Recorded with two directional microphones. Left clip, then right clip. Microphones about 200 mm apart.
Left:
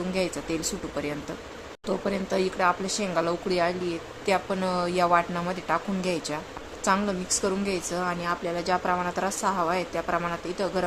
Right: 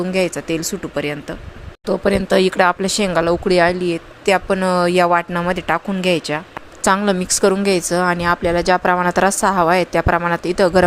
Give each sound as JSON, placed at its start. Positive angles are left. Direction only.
{"t": 0.1, "sound": "speech", "side_deg": -40}
{"t": 6.8, "sound": "a woman's voice", "side_deg": -45}